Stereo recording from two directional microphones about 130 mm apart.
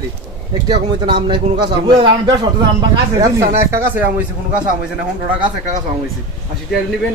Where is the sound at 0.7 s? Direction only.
35° right (ahead or behind).